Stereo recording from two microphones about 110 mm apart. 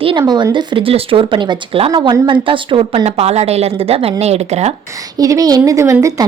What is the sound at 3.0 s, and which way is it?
A woman's voice, 75° right (ahead or behind).